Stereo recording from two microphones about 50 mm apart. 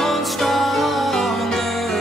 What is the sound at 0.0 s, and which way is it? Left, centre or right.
Music, centre.